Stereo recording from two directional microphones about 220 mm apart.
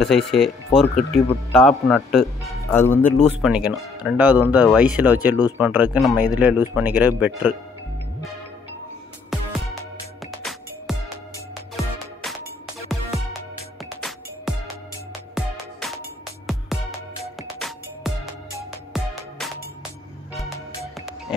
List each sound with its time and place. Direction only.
0.0 s speech: centre (ahead or behind)
3.1 s speech: 30° left (ahead or behind)
3.3 s speech: 5° right (ahead or behind)
10.2 s music: centre (ahead or behind)
17.4 s music: centre (ahead or behind)